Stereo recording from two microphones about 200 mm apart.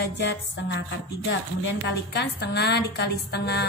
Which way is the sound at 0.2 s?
60° left (ahead or behind).